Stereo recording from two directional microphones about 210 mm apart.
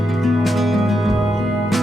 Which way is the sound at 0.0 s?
Centre (ahead or behind).